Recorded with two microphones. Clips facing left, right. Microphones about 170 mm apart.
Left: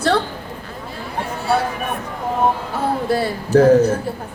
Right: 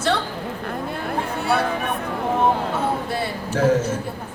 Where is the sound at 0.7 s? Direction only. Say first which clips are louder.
Right 4 dB; 60° right (ahead or behind).